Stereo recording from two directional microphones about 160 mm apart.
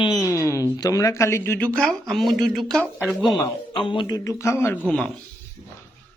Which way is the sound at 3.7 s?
30° left (ahead or behind).